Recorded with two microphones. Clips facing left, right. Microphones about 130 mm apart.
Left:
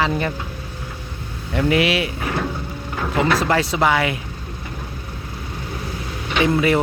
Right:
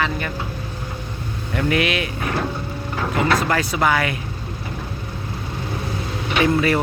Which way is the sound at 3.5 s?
25° left (ahead or behind).